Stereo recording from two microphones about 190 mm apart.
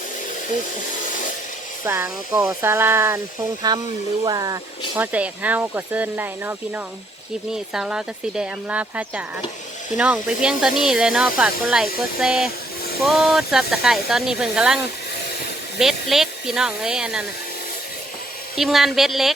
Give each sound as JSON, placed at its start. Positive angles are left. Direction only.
{"t": 1.8, "sound": "speech", "side_deg": -15}
{"t": 5.1, "sound": "speech", "side_deg": -10}
{"t": 15.8, "sound": "speech", "side_deg": 0}
{"t": 18.5, "sound": "speech", "side_deg": 0}